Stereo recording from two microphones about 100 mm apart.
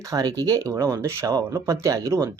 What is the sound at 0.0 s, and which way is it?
Speech, 40° right (ahead or behind).